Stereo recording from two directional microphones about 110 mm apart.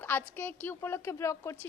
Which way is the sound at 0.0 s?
20° left (ahead or behind).